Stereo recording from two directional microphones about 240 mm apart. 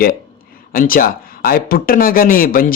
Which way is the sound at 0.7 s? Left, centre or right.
Left.